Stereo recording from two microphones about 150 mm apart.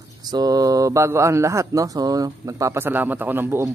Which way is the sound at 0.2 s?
25° right (ahead or behind).